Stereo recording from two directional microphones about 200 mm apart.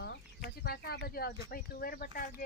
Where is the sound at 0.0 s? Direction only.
55° left (ahead or behind).